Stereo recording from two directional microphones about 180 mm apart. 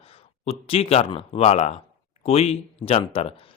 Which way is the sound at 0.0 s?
35° left (ahead or behind).